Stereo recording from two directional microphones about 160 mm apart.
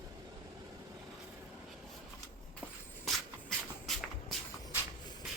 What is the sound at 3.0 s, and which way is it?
Shuffle, centre (ahead or behind).